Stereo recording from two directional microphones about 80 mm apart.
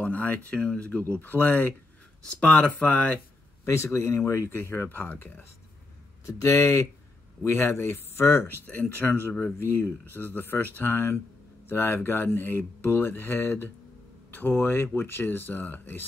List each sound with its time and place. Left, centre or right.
0.0 s speech: centre
2.2 s speech: centre
3.6 s speech: left
6.2 s speech: left